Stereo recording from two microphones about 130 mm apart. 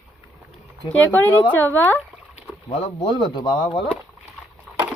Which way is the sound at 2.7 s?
40° left (ahead or behind).